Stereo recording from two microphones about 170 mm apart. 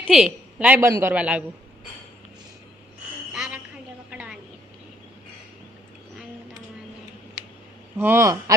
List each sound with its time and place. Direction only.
0.0 s a woman's voice: 5° right (ahead or behind)
3.3 s a sound: 5° right (ahead or behind)
7.9 s a man's voice: 10° right (ahead or behind)